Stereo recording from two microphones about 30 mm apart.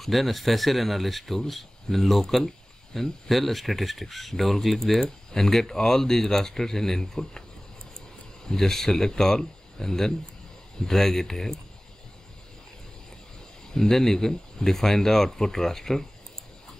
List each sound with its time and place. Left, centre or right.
0.0 s speech: centre
5.0 s speech: centre
8.5 s speech: centre
13.7 s speech: centre